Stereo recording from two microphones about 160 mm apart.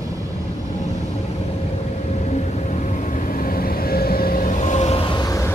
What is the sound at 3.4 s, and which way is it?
Vehicle, 60° left (ahead or behind).